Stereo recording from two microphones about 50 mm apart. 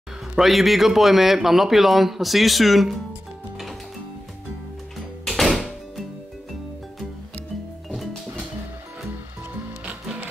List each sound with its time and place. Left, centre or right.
0.4 s a man's voice: centre
5.2 s music: centre